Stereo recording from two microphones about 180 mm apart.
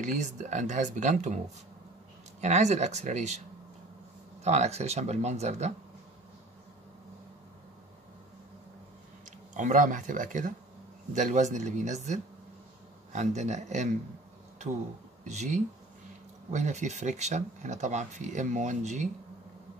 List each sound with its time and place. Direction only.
0.0 s speech: 40° right (ahead or behind)
2.4 s speech: 40° right (ahead or behind)
4.4 s speech: 35° right (ahead or behind)
9.2 s speech: 45° right (ahead or behind)
15.2 s speech: 40° right (ahead or behind)